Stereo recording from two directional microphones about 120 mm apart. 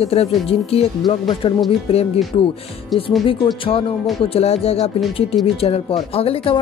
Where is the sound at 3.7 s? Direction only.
50° left (ahead or behind).